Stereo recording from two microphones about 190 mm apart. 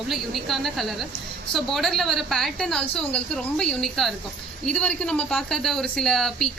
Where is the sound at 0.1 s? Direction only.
Centre (ahead or behind).